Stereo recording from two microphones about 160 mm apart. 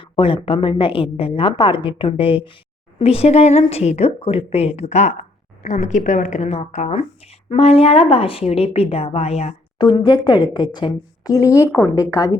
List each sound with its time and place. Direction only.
0.0 s a woman's voice: 30° left (ahead or behind)
9.7 s a woman's voice: 25° left (ahead or behind)